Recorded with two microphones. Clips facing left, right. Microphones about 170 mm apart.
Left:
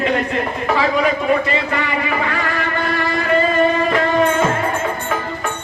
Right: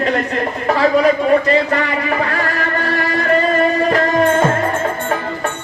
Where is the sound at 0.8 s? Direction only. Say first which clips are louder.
Right 5 dB; 40° right (ahead or behind).